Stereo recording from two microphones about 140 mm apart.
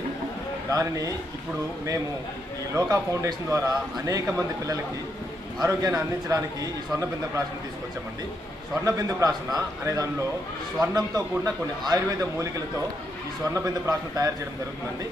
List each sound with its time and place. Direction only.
0.7 s a man's voice: 25° right (ahead or behind)
2.7 s a man's voice: 20° right (ahead or behind)
5.6 s a man's voice: 25° right (ahead or behind)
8.8 s a man's voice: 25° right (ahead or behind)